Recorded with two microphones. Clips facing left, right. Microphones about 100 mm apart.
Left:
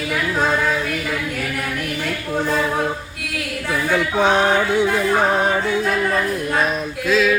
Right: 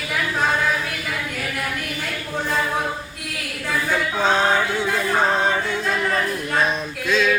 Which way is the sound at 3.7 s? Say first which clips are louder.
Left 3 dB; 20° left (ahead or behind).